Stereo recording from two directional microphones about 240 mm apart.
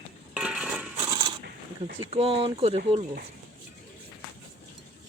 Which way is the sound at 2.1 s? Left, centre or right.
Right.